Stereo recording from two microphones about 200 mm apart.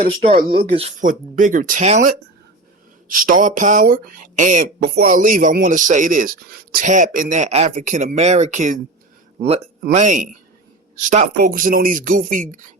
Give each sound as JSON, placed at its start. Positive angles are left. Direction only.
{"t": 0.0, "sound": "speech", "side_deg": -30}